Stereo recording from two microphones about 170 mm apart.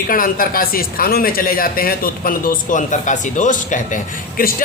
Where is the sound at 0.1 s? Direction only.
55° left (ahead or behind).